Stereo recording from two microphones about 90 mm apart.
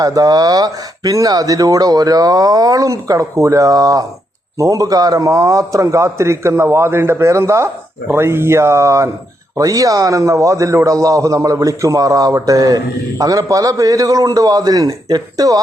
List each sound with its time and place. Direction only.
0.0 s a man's voice: 40° right (ahead or behind)